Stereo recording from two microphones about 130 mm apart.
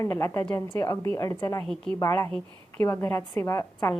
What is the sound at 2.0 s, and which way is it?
A woman's voice, 25° left (ahead or behind).